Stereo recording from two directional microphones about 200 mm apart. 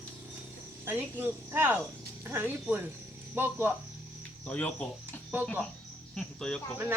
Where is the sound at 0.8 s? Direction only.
10° right (ahead or behind).